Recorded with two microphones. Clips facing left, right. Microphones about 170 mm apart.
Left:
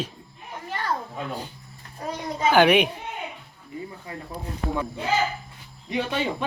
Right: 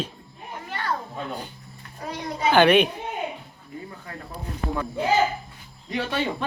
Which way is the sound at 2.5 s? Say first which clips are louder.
Right 1 dB; 10° left (ahead or behind).